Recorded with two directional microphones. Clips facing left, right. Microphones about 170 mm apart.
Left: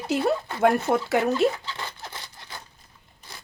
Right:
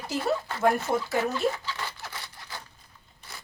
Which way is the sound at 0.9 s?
80° left.